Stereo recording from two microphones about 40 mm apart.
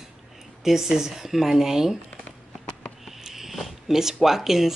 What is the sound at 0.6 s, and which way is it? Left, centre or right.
Speech, centre.